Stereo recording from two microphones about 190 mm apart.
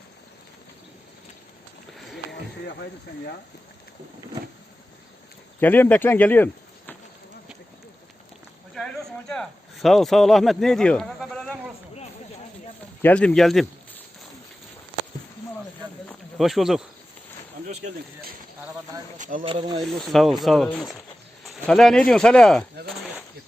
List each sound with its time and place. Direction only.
2.0 s a sound: centre (ahead or behind)
2.3 s speech: 60° left (ahead or behind)
5.5 s speech: 10° left (ahead or behind)
8.7 s speech: centre (ahead or behind)
13.0 s speech: 10° left (ahead or behind)
16.0 s a sound: centre (ahead or behind)
19.1 s speech: 40° right (ahead or behind)
19.4 s speech: 25° right (ahead or behind)
20.0 s speech: centre (ahead or behind)
21.4 s bird: centre (ahead or behind)
22.1 s speech: 5° left (ahead or behind)